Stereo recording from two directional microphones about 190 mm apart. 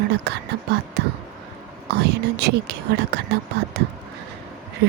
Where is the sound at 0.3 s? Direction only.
60° right (ahead or behind).